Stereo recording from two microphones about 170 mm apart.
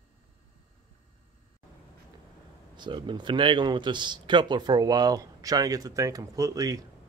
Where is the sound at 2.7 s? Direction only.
25° right (ahead or behind).